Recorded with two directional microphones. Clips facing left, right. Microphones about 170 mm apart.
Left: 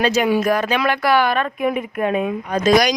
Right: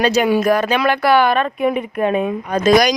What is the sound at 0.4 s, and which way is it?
Speech, 35° right (ahead or behind).